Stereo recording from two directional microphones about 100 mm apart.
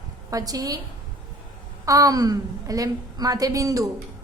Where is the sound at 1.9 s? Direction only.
35° right (ahead or behind).